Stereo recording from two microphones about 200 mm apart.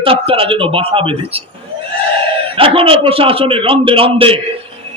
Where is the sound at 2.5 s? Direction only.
25° right (ahead or behind).